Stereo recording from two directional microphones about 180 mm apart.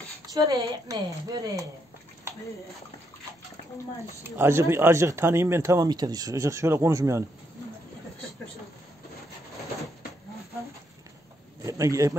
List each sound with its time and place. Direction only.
0.3 s a woman's voice: 20° right (ahead or behind)
4.2 s speech: 15° right (ahead or behind)
11.6 s speech: 15° right (ahead or behind)